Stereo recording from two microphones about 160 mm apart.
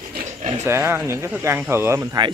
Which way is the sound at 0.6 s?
15° right (ahead or behind).